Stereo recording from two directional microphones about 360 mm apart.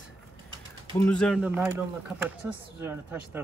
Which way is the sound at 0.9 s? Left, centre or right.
Centre.